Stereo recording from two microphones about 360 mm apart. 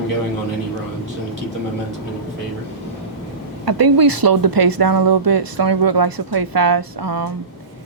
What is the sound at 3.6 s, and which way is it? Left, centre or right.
Speech, right.